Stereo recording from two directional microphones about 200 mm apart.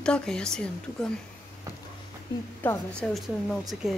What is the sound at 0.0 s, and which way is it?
Speech, 5° left (ahead or behind).